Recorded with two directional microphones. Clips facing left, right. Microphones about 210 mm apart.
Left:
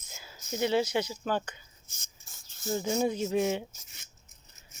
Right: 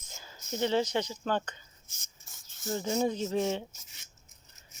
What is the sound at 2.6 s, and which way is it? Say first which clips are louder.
Speech: left 1 dB; 10° left (ahead or behind).